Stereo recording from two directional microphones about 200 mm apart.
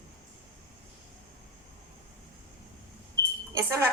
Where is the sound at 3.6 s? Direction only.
15° right (ahead or behind).